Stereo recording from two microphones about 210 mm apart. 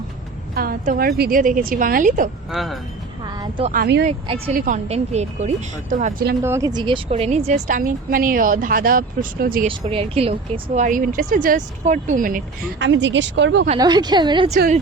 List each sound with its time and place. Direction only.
0.5 s speech: 45° right (ahead or behind)
2.5 s speech: centre (ahead or behind)
3.2 s a sound: 20° right (ahead or behind)
3.7 s speech: 50° right (ahead or behind)
4.0 s a woman's voice: 25° right (ahead or behind)
4.5 s speech: 40° right (ahead or behind)
4.9 s speech: 30° right (ahead or behind)
6.4 s speech: 15° right (ahead or behind); by 9.6 s 45° right (ahead or behind)
9.6 s speech: 25° right (ahead or behind)
12.8 s speech: 60° right (ahead or behind)
13.7 s a woman's voice: 20° right (ahead or behind)